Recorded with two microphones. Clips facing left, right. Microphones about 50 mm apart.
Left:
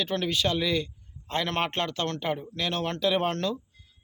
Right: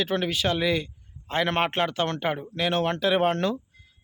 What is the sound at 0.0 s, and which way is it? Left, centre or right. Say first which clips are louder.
Speech: right 2 dB; centre.